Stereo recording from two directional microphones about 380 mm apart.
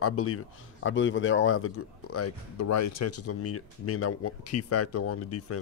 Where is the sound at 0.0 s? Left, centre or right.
Left.